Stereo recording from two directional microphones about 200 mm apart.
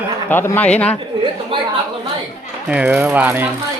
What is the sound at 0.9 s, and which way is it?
Speech, 25° right (ahead or behind).